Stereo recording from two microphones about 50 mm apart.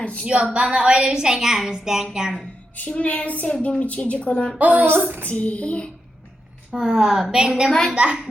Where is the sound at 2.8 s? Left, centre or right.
Left.